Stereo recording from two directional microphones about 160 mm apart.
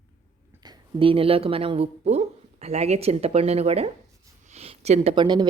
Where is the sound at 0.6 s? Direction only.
25° right (ahead or behind).